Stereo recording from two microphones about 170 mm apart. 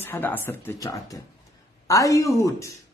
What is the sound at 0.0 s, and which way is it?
A man's voice, 10° left (ahead or behind).